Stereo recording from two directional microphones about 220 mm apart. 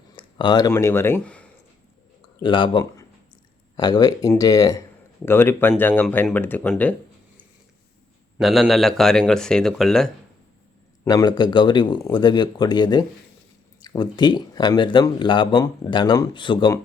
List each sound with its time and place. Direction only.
0.2 s speech: 20° left (ahead or behind)
2.4 s speech: 20° left (ahead or behind)
8.4 s speech: centre (ahead or behind)
11.0 s speech: 15° left (ahead or behind)